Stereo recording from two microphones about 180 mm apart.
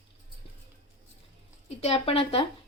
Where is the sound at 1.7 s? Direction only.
35° left (ahead or behind).